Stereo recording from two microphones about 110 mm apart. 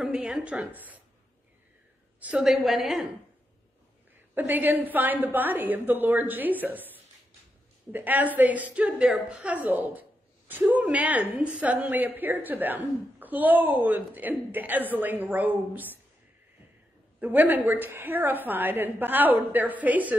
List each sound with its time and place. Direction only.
0.0 s a woman's voice: 5° right (ahead or behind)
2.1 s a woman's voice: 10° right (ahead or behind)
4.4 s a woman's voice: 15° right (ahead or behind)
17.2 s a woman's voice: 15° right (ahead or behind)